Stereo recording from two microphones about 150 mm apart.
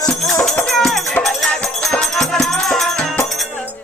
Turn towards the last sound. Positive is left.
turn(degrees=5)  # may be behind; listen again after turning